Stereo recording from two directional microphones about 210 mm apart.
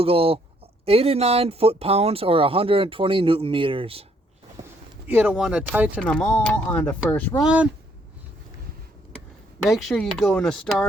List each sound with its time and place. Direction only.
0.0 s speech: 25° right (ahead or behind)
5.0 s speech: 5° right (ahead or behind)
6.0 s speech: 5° left (ahead or behind)
7.4 s speech: 5° right (ahead or behind)
9.6 s speech: centre (ahead or behind)